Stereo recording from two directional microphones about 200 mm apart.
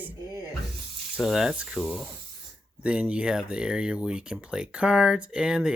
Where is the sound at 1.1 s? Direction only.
5° right (ahead or behind).